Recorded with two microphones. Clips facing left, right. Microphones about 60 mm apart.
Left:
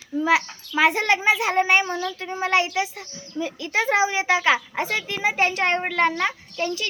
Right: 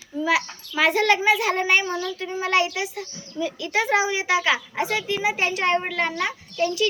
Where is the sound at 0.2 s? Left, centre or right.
Left.